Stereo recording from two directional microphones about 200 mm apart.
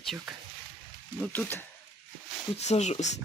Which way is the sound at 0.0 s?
Centre (ahead or behind).